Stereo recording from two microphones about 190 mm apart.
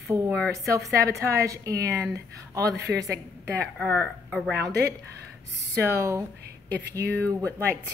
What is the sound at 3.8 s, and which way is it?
Speech, 5° left (ahead or behind).